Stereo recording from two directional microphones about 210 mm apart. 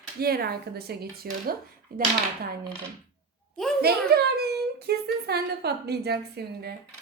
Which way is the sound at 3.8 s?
50° right (ahead or behind).